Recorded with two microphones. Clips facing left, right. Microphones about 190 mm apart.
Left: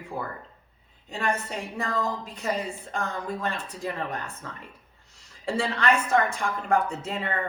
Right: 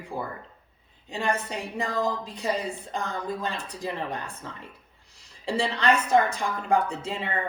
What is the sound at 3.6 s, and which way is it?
A woman's voice, 15° right (ahead or behind).